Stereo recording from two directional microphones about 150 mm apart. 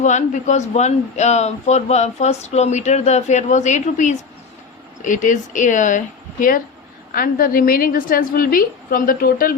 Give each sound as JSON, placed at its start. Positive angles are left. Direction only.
{"t": 0.0, "sound": "speech", "side_deg": 50}
{"t": 7.1, "sound": "a woman's voice", "side_deg": 75}